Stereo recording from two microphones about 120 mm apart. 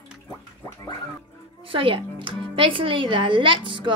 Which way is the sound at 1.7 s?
45° right (ahead or behind).